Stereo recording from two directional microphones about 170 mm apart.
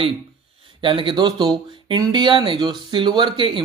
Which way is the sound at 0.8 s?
30° right (ahead or behind).